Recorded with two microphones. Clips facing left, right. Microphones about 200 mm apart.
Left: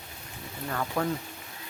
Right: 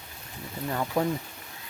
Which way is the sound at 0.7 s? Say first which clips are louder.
Right 3 dB; 20° right (ahead or behind).